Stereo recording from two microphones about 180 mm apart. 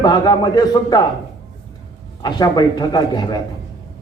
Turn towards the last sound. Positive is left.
turn(degrees=20)  # may be behind; listen again after turning